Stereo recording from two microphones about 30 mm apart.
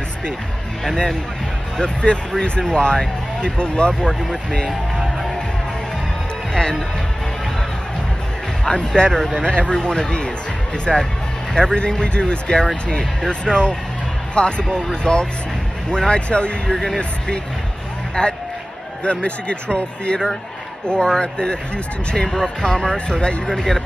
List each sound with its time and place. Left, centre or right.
1.8 s speech: left
8.6 s speech: left
11.5 s speech: left
14.7 s speech: left
16.7 s speech: centre
18.2 s speech: left